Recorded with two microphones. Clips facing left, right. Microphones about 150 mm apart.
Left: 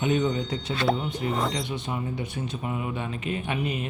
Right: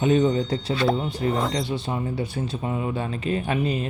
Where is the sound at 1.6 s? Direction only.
35° right (ahead or behind).